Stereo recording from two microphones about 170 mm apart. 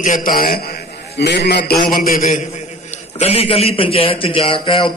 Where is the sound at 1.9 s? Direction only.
55° left (ahead or behind).